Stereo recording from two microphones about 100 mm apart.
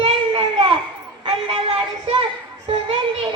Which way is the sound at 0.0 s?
65° right (ahead or behind).